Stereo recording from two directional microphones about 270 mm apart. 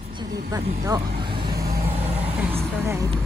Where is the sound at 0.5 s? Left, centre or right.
Centre.